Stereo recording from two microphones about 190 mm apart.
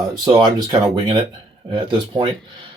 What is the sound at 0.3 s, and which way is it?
Speech, 20° right (ahead or behind).